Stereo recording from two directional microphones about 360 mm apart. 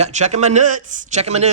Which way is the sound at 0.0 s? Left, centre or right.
Centre.